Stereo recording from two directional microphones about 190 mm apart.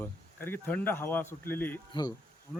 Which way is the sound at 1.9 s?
25° left (ahead or behind).